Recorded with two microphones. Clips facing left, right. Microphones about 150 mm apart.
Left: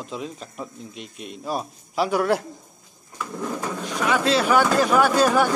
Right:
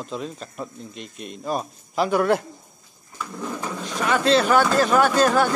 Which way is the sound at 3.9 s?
5° left (ahead or behind).